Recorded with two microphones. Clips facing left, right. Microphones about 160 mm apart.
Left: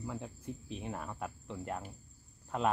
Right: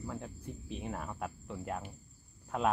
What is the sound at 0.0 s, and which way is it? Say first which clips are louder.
Speech: even; centre (ahead or behind).